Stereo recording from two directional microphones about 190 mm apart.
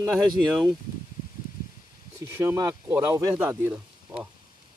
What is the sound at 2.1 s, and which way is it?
Speech, 15° right (ahead or behind).